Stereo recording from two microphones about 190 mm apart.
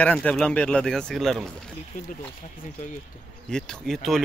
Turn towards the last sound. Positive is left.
turn(degrees=0)  # may be behind; listen again after turning